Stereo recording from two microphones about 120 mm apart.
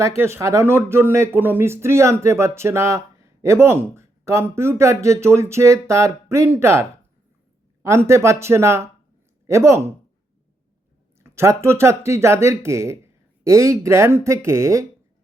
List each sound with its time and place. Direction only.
0.2 s speech: 20° right (ahead or behind)
11.2 s speech: 20° right (ahead or behind)